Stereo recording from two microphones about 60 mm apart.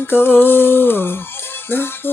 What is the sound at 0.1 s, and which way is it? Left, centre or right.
Music, left.